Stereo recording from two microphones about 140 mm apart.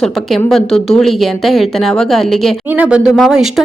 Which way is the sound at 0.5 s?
5° left (ahead or behind).